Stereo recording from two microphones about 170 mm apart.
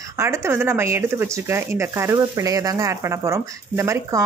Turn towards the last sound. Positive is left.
turn(degrees=-15)  # may be behind; listen again after turning